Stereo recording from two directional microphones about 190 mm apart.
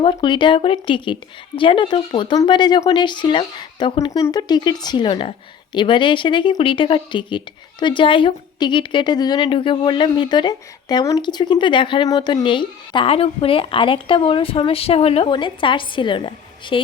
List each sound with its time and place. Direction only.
0.0 s speech: 25° left (ahead or behind)